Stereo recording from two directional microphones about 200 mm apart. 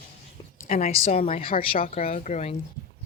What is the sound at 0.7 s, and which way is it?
Speech, 40° left (ahead or behind).